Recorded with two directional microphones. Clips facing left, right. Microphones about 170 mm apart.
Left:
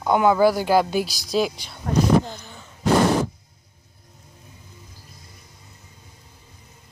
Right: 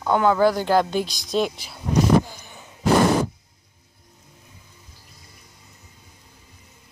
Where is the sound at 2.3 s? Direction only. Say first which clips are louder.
Left 5 dB; 15° right (ahead or behind).